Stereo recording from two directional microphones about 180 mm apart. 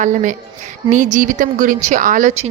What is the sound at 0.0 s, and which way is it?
A woman's voice, 45° right (ahead or behind).